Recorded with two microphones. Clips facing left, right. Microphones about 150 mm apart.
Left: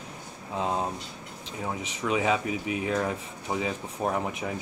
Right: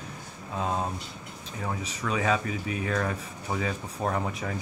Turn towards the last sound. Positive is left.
turn(degrees=15)  # may be behind; listen again after turning